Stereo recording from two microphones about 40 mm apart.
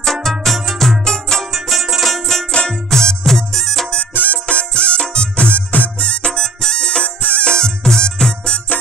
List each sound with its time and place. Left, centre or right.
0.0 s music: centre
1.0 s music: centre
1.5 s music: centre
2.5 s music: centre
4.1 s music: left
4.5 s music: left
7.2 s music: left
7.4 s music: centre